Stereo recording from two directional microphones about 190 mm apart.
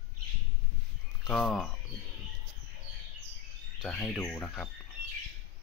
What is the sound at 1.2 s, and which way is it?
Speech, centre (ahead or behind).